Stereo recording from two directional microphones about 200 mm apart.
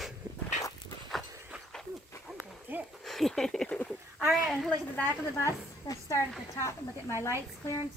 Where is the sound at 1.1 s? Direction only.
Centre (ahead or behind).